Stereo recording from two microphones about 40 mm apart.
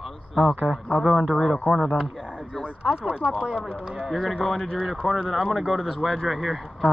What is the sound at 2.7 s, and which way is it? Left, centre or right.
Speech, right.